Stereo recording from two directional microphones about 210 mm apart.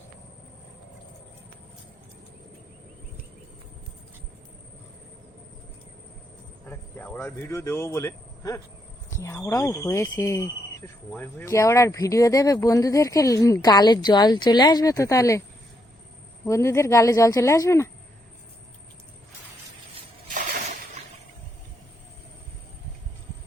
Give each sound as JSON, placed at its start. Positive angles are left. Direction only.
{"t": 6.7, "sound": "speech", "side_deg": 10}
{"t": 16.5, "sound": "speech", "side_deg": 15}
{"t": 20.2, "sound": "shatter", "side_deg": -35}